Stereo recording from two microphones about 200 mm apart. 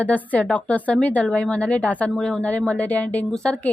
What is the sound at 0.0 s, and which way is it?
A woman's voice, 10° left (ahead or behind).